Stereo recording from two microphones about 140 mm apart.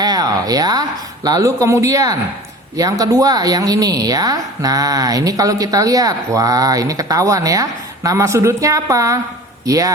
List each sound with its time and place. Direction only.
0.0 s speech: 30° right (ahead or behind)